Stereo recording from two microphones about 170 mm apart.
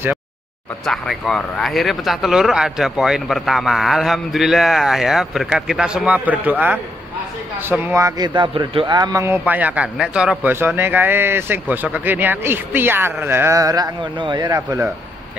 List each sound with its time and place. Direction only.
0.8 s speech: centre (ahead or behind)
7.9 s a man's voice: 20° right (ahead or behind)